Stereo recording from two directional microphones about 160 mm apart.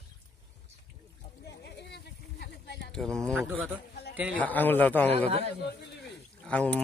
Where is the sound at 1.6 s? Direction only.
90° left.